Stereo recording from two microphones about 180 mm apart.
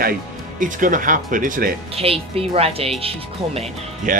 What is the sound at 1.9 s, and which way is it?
A woman's voice, 35° right (ahead or behind).